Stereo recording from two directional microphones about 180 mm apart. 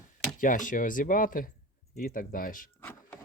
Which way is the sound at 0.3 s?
45° left (ahead or behind).